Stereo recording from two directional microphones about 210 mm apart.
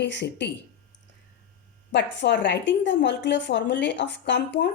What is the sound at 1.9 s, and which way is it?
Speech, 55° left (ahead or behind).